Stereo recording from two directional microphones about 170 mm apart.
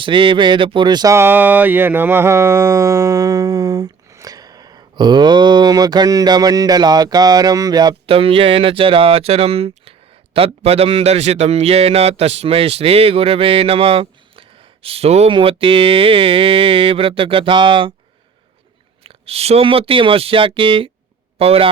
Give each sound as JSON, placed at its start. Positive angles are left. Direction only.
{"t": 0.0, "sound": "speech", "side_deg": -30}
{"t": 19.0, "sound": "a man's voice", "side_deg": -35}